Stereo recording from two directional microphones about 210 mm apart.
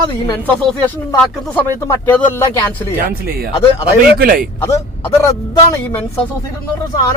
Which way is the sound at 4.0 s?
45° right (ahead or behind).